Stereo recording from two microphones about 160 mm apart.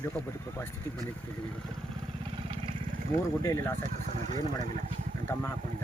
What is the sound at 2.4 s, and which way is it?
Vehicle, 35° right (ahead or behind).